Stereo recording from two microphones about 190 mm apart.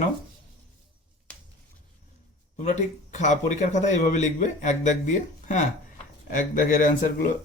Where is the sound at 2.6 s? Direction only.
40° left (ahead or behind).